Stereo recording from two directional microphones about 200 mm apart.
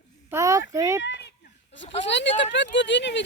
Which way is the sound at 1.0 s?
60° left (ahead or behind).